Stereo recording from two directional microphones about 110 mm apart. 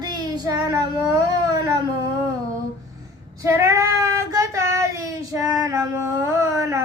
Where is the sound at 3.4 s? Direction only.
25° right (ahead or behind).